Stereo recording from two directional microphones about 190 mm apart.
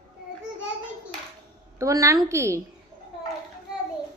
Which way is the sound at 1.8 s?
15° right (ahead or behind).